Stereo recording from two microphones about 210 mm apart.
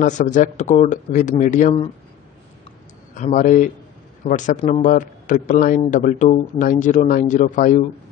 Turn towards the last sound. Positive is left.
turn(degrees=35)  # may be behind; listen again after turning